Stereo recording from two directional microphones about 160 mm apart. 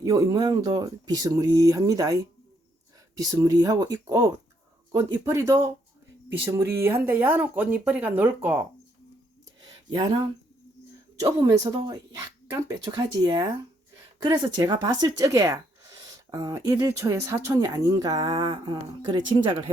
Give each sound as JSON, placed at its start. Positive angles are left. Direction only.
{"t": 0.0, "sound": "speech", "side_deg": -20}
{"t": 9.9, "sound": "speech", "side_deg": -30}
{"t": 11.2, "sound": "speech", "side_deg": -20}